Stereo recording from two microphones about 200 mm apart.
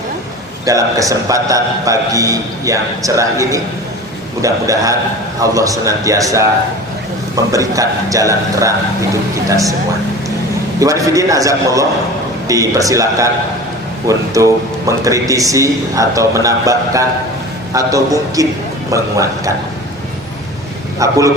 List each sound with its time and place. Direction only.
0.6 s a man's voice: 15° right (ahead or behind)
7.5 s a man's voice: 15° right (ahead or behind)
10.8 s a man's voice: 15° right (ahead or behind)
21.0 s a man's voice: 15° right (ahead or behind)